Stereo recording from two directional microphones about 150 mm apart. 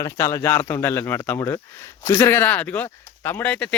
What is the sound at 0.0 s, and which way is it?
Speech, 20° left (ahead or behind).